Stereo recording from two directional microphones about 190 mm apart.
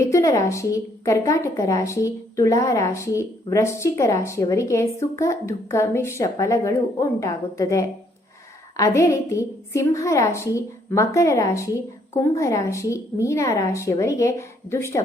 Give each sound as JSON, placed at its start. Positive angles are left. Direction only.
{"t": 0.0, "sound": "a woman's voice", "side_deg": 15}